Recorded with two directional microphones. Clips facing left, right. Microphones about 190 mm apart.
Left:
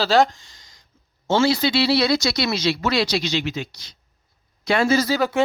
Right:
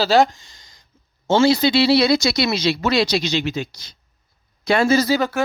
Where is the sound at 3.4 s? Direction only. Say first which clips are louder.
Right 3 dB; 40° right (ahead or behind).